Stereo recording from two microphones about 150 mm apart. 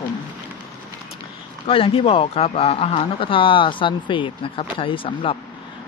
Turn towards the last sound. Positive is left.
turn(degrees=40)  # may be behind; listen again after turning